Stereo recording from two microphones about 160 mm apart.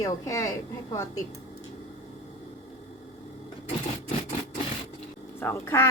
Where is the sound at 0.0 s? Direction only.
20° left (ahead or behind).